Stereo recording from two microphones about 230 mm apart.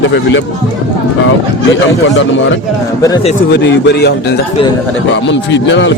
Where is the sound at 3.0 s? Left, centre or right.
Centre.